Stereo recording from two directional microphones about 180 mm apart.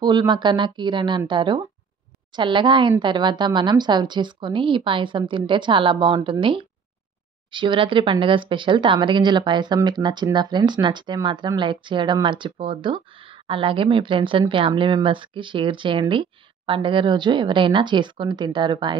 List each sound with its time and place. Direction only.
0.0 s speech: 25° right (ahead or behind)